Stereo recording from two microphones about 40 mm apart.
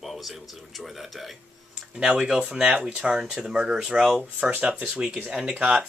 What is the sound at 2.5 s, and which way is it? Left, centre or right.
Speech, right.